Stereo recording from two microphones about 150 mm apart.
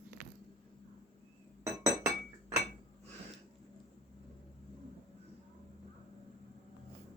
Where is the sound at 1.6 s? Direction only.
20° right (ahead or behind).